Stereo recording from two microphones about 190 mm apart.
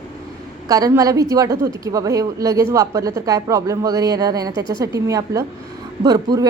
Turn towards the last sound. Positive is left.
turn(degrees=-20)  # may be behind; listen again after turning